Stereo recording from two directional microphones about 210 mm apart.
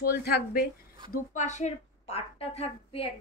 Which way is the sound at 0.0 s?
45° left (ahead or behind).